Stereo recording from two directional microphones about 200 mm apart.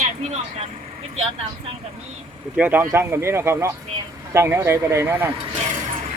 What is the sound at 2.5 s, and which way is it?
Speech, 10° right (ahead or behind).